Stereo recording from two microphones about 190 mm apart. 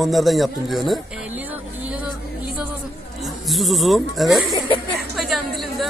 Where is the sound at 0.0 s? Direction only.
Centre (ahead or behind).